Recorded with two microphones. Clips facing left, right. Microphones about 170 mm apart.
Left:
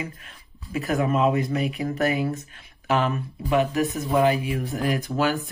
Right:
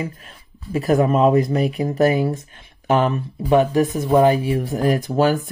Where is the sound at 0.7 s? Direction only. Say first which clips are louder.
Right 6 dB; 35° right (ahead or behind).